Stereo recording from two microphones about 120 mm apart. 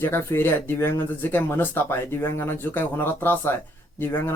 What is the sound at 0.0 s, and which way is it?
Speech, 20° left (ahead or behind).